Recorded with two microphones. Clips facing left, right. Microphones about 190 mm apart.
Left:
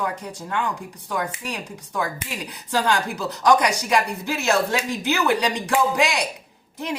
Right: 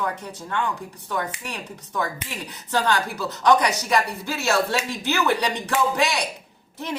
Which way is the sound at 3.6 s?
15° left (ahead or behind).